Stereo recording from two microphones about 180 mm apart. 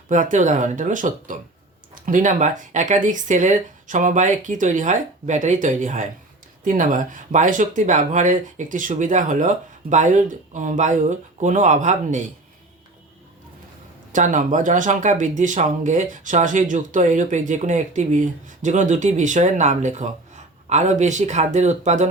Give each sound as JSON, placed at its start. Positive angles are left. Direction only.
{"t": 0.1, "sound": "speech", "side_deg": -45}
{"t": 14.1, "sound": "speech", "side_deg": -45}